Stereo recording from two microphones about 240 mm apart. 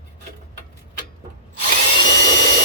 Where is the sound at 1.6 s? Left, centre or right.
Right.